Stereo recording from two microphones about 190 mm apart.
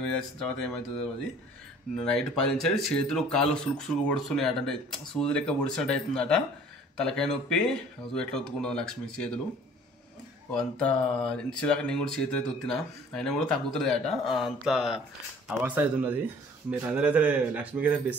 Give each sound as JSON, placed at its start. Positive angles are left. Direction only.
{"t": 0.0, "sound": "speech", "side_deg": 5}
{"t": 2.0, "sound": "speech", "side_deg": 5}
{"t": 10.5, "sound": "speech", "side_deg": 5}